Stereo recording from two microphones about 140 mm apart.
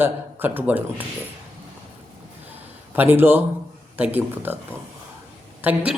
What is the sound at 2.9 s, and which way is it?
A man's voice, 15° right (ahead or behind).